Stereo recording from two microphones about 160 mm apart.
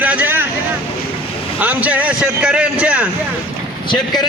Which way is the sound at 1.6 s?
10° right (ahead or behind).